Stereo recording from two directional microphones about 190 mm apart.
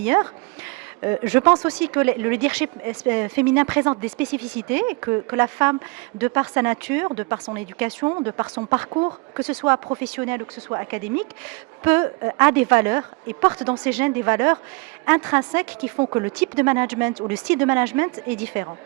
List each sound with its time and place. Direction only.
0.0 s speech: 15° right (ahead or behind)
8.0 s speech: 20° right (ahead or behind)